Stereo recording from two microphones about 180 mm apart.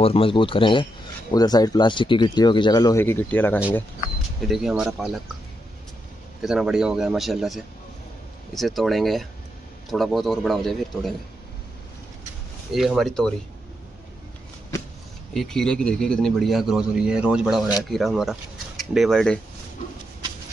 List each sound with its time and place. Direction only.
0.0 s speech: 30° left (ahead or behind); by 3.6 s 10° left (ahead or behind)
4.4 s a man's voice: centre (ahead or behind)
6.4 s a man's voice: 5° right (ahead or behind)
12.7 s a man's voice: centre (ahead or behind)
15.3 s a man's voice: 5° left (ahead or behind)